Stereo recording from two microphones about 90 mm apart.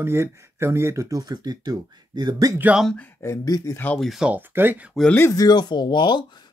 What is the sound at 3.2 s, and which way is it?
Speech, 40° left (ahead or behind).